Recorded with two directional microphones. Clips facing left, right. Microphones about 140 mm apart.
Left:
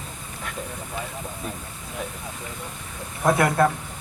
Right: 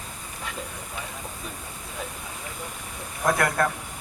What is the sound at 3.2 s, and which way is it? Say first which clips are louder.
Speech: left 4 dB; 25° left (ahead or behind).